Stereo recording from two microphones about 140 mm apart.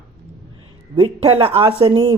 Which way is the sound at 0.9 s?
40° right (ahead or behind).